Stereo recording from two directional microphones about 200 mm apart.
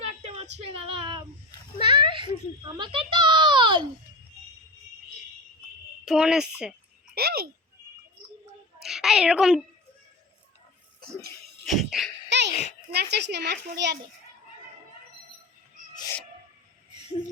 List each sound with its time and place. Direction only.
0.0 s female singing: 30° right (ahead or behind)
2.0 s a sound: 25° right (ahead or behind)
6.1 s speech: 5° right (ahead or behind)
7.1 s a child's voice: 50° right (ahead or behind)
8.8 s a child's voice: centre (ahead or behind)
11.6 s speech: centre (ahead or behind)
12.3 s a child's voice: 60° right (ahead or behind)
16.0 s a sound: 15° left (ahead or behind)